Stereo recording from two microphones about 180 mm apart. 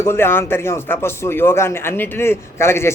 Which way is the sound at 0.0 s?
15° left (ahead or behind).